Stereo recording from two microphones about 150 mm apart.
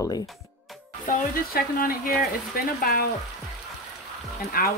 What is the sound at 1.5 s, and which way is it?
Speech, 70° left (ahead or behind).